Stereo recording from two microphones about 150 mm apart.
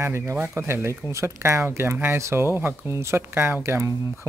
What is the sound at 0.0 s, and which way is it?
Speech, 15° right (ahead or behind).